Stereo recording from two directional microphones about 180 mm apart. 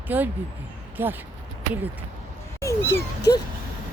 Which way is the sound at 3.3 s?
20° left (ahead or behind).